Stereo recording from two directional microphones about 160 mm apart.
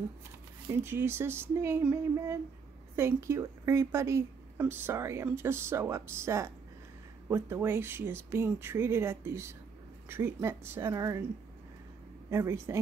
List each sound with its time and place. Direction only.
0.7 s a woman's voice: 15° right (ahead or behind)
12.3 s speech: 15° right (ahead or behind)